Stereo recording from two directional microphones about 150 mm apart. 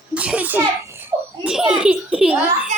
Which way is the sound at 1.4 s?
5° right (ahead or behind).